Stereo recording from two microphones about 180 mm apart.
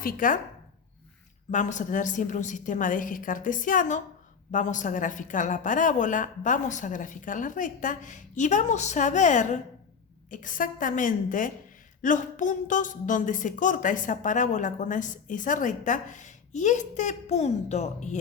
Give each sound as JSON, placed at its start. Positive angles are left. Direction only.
{"t": 0.0, "sound": "a woman's voice", "side_deg": 50}
{"t": 1.5, "sound": "a woman's voice", "side_deg": 45}